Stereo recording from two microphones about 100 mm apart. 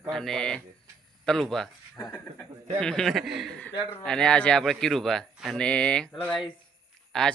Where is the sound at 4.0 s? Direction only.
10° left (ahead or behind).